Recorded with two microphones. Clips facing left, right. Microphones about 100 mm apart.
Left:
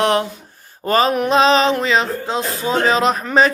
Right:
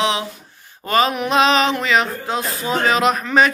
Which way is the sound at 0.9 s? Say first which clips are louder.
Left 2 dB; 35° left (ahead or behind).